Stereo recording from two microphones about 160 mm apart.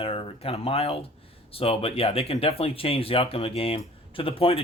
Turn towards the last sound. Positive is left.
turn(degrees=35)  # may be behind; listen again after turning